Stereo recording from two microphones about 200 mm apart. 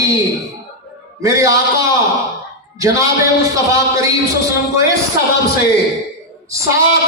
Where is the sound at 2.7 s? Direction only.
15° right (ahead or behind).